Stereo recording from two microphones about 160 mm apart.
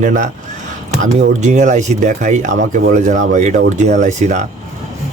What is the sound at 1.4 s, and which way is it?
Speech, 50° right (ahead or behind).